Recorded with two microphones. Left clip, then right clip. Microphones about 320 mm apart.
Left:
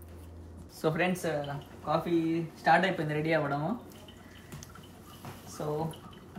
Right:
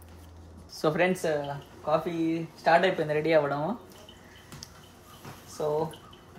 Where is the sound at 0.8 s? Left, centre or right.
Right.